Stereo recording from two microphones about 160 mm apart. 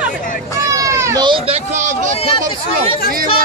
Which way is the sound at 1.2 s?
35° right (ahead or behind).